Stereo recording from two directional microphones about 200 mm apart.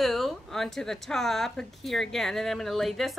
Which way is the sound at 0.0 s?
Centre (ahead or behind).